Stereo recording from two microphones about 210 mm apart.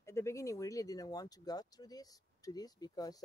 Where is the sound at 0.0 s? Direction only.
15° left (ahead or behind).